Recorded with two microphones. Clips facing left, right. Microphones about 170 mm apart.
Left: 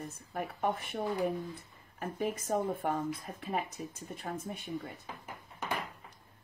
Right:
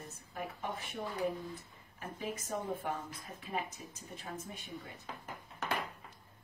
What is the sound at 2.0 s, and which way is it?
Speech, 55° left (ahead or behind).